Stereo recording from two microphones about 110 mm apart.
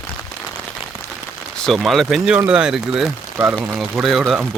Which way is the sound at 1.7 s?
Centre (ahead or behind).